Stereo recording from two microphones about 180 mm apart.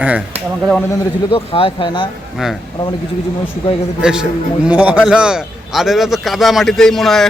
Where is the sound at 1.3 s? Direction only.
30° left (ahead or behind).